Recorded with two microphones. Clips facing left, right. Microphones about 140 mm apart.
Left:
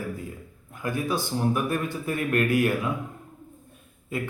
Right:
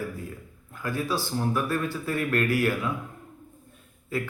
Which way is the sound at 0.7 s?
20° left (ahead or behind).